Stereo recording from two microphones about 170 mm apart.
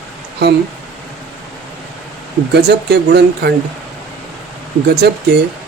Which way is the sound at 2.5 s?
75° right (ahead or behind).